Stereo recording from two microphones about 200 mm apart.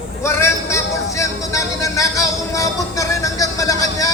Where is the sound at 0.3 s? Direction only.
15° left (ahead or behind).